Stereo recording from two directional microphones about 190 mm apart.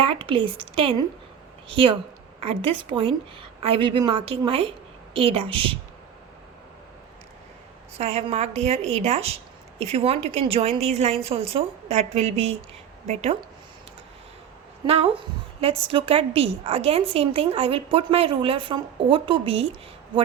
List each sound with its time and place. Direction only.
0.0 s a woman's voice: 25° right (ahead or behind)
7.9 s a woman's voice: 35° right (ahead or behind)
14.8 s a woman's voice: 30° right (ahead or behind)